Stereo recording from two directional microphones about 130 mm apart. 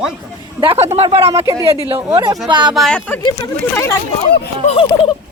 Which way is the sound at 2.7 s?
Centre (ahead or behind).